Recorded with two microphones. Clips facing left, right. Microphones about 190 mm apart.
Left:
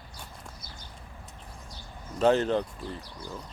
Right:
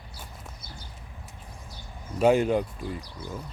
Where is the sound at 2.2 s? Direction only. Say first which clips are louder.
Right 2 dB; 10° right (ahead or behind).